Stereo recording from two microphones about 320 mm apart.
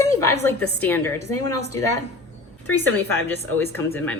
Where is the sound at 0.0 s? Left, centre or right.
Centre.